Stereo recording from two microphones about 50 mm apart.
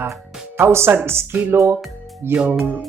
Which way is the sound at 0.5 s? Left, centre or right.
Right.